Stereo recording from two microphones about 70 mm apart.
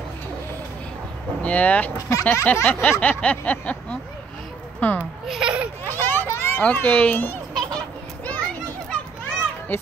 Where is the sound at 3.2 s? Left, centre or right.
Centre.